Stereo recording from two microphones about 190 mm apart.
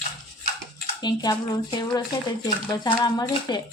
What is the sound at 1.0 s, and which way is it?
A woman's voice, 20° left (ahead or behind).